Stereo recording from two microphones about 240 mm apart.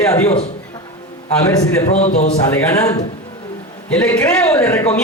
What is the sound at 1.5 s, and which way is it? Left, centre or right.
Speech, centre.